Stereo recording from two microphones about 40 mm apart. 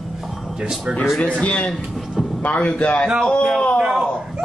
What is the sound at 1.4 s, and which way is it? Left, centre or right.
A man's voice, left.